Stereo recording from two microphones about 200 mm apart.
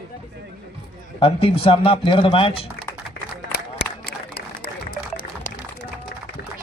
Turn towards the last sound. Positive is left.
turn(degrees=55)  # may be behind; listen again after turning